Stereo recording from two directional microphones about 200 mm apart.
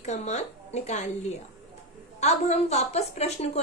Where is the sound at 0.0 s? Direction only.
35° left (ahead or behind).